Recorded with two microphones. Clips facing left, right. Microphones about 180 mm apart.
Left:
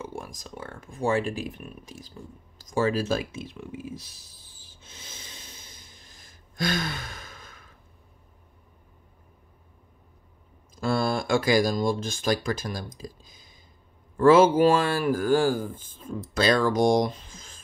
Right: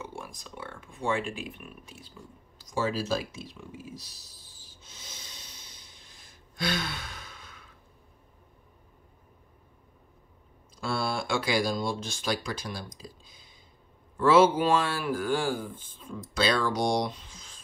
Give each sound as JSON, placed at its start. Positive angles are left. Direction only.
{"t": 0.0, "sound": "speech", "side_deg": 45}
{"t": 2.7, "sound": "speech", "side_deg": 55}
{"t": 5.7, "sound": "a sound", "side_deg": 45}
{"t": 11.0, "sound": "a man's voice", "side_deg": 45}